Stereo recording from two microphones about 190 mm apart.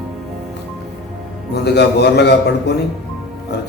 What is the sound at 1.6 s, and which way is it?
A man's voice, 60° left (ahead or behind).